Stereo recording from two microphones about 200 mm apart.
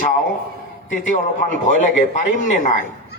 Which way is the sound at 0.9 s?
40° left (ahead or behind).